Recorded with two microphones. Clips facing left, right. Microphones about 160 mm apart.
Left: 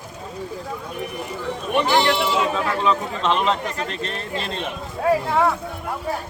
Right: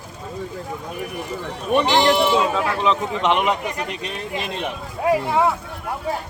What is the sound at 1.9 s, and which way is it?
A man's voice, 20° right (ahead or behind).